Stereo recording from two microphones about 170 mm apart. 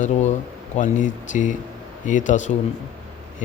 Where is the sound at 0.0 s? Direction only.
45° left (ahead or behind).